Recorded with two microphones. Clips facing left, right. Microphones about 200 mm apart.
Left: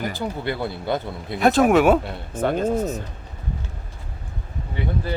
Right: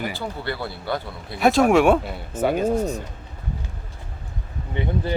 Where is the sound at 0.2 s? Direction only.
20° left (ahead or behind).